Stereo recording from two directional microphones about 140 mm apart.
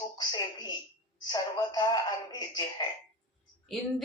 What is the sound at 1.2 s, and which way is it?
Speech, 30° left (ahead or behind).